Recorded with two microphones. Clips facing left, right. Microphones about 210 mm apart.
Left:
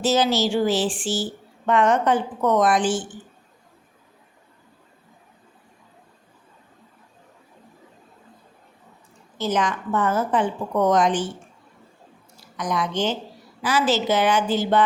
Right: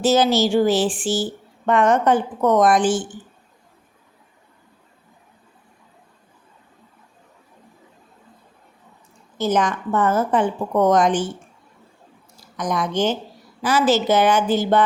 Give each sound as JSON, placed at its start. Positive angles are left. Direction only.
{"t": 0.0, "sound": "speech", "side_deg": -50}
{"t": 9.4, "sound": "speech", "side_deg": -45}
{"t": 12.4, "sound": "speech", "side_deg": -45}